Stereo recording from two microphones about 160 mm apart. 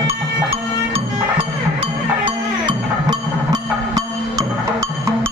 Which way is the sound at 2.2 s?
30° right (ahead or behind).